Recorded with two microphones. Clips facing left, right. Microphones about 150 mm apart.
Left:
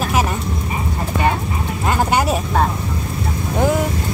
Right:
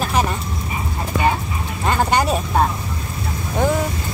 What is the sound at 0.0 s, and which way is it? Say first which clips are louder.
Vehicle: left 1 dB; 5° left (ahead or behind).